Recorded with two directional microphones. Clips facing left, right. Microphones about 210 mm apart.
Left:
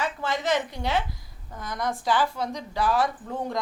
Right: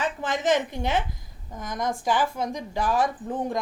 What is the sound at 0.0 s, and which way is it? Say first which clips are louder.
A woman's voice: right 2 dB; 15° right (ahead or behind).